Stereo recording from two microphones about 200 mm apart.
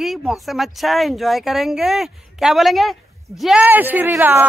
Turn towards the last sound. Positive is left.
turn(degrees=-10)  # may be behind; listen again after turning